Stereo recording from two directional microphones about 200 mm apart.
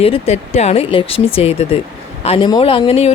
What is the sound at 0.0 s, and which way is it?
A woman's voice, 30° left (ahead or behind).